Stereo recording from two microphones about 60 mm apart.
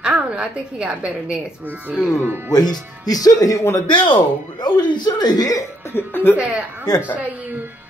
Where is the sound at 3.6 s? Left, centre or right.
Left.